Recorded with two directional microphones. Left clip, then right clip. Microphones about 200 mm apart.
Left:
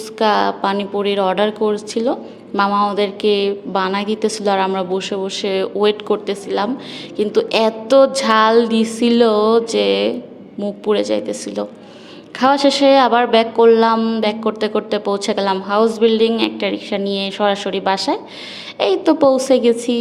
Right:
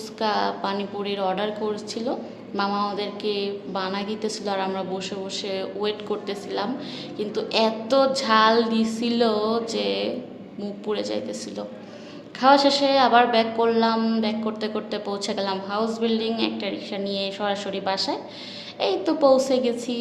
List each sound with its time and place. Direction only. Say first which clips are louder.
0.2 s a woman's voice: left 9 dB; 40° left (ahead or behind)